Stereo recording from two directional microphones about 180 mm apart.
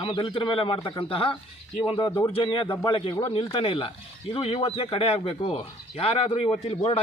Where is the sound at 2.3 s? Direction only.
30° left (ahead or behind).